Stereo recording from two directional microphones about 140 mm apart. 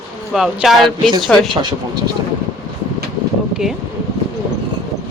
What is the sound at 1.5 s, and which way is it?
Speech, 35° right (ahead or behind).